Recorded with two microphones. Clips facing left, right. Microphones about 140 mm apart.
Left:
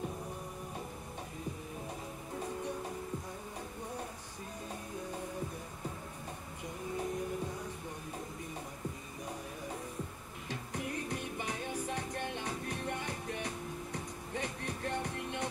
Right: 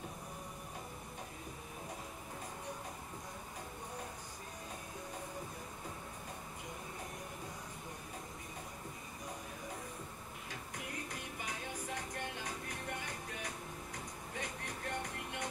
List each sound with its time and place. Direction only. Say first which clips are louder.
11.1 s music: left 6 dB; 30° left (ahead or behind)